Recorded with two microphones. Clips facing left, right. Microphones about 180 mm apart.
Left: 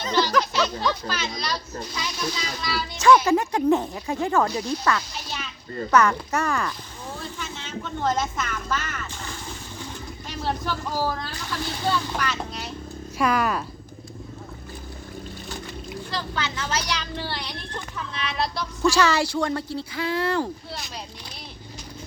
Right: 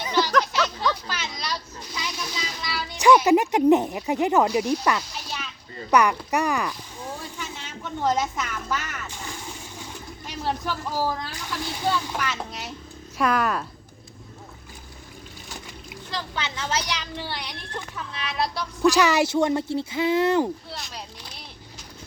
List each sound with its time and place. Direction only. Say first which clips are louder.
0.0 s a sound: left 1 dB; 10° right (ahead or behind)
1.9 s speech: left 2 dB; 15° right (ahead or behind)
13.1 s speech: even; centre (ahead or behind)
15.4 s speech: left 5 dB; 15° right (ahead or behind)
17.7 s speech: left 1 dB; 5° right (ahead or behind); by 20.5 s 20° right (ahead or behind)